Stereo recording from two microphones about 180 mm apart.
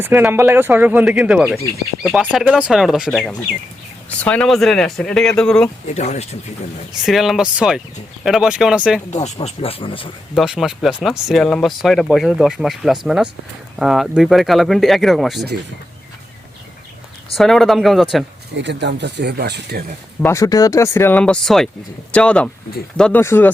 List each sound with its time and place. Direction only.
0.0 s speech: 10° right (ahead or behind); by 5.6 s 5° left (ahead or behind)
5.9 s speech: 35° left (ahead or behind)
7.0 s speech: centre (ahead or behind)
9.0 s speech: 40° left (ahead or behind)
10.3 s speech: centre (ahead or behind)
17.3 s speech: centre (ahead or behind)
18.5 s speech: 75° right (ahead or behind)
20.2 s speech: 15° left (ahead or behind)